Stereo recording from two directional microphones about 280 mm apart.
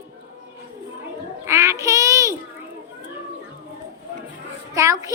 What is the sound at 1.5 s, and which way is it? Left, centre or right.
Speech, centre.